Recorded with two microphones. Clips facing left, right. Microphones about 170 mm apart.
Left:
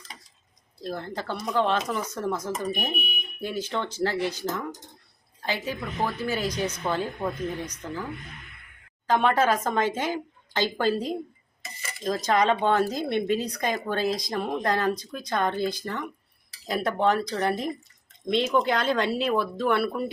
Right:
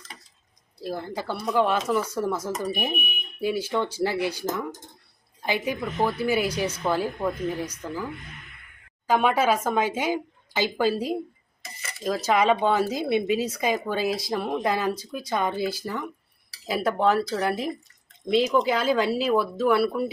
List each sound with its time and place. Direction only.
0.8 s speech: 10° right (ahead or behind)
9.0 s speech: 10° right (ahead or behind)